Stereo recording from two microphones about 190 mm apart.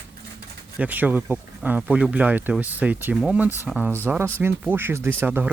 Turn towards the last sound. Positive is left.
turn(degrees=-10)  # may be behind; listen again after turning